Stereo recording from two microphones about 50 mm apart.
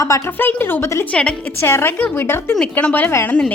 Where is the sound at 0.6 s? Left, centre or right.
Left.